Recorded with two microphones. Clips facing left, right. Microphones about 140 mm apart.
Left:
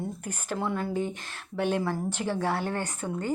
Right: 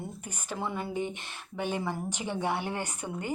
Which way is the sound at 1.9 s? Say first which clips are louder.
Left 4 dB; 15° right (ahead or behind).